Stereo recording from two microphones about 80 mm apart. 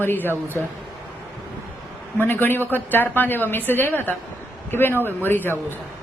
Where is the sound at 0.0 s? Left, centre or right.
Left.